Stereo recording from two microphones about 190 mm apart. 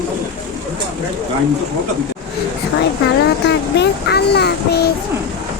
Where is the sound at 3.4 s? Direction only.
60° left (ahead or behind).